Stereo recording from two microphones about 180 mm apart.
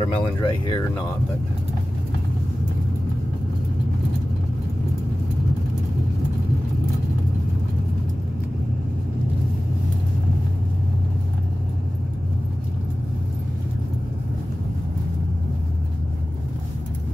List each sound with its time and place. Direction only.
0.0 s speech: 30° left (ahead or behind)